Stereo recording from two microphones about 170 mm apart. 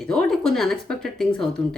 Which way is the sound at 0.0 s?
5° left (ahead or behind).